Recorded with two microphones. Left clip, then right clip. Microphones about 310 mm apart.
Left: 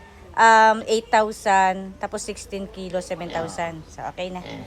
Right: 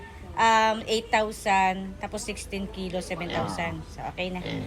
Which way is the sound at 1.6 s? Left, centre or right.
Left.